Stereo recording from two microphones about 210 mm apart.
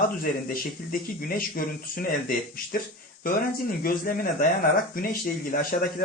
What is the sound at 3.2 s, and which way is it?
Speech, 45° left (ahead or behind).